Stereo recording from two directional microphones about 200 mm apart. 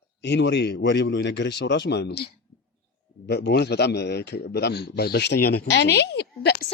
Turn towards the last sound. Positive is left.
turn(degrees=55)  # may be behind; listen again after turning